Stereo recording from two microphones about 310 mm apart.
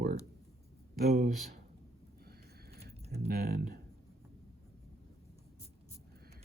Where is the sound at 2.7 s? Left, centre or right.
Right.